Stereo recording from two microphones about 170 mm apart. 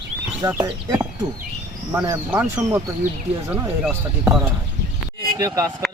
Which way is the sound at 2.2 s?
10° right (ahead or behind).